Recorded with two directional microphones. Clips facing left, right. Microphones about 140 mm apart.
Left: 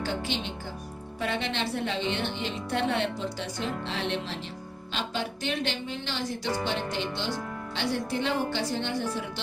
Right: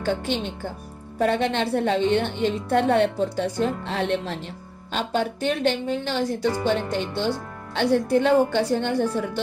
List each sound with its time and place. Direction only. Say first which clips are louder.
0.0 s a woman's voice: right 6 dB; 55° right (ahead or behind)